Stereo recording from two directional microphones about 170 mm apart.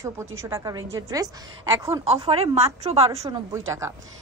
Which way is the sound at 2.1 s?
35° right (ahead or behind).